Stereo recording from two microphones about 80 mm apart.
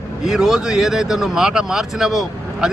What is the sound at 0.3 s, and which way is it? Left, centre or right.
Speech, centre.